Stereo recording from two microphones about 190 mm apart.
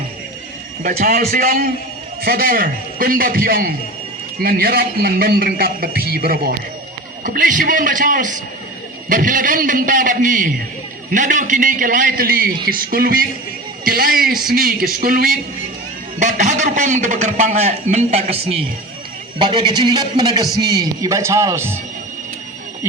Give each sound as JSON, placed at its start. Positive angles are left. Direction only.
{"t": 0.8, "sound": "a man's voice", "side_deg": -50}